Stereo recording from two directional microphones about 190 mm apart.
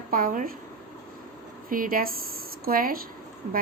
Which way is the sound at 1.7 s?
45° right (ahead or behind).